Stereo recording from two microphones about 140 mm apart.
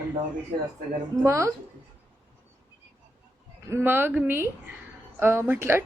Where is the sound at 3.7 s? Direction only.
15° right (ahead or behind).